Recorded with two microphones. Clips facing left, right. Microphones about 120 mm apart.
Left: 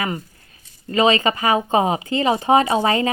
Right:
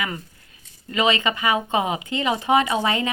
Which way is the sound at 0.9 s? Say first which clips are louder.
Left 5 dB; 35° left (ahead or behind).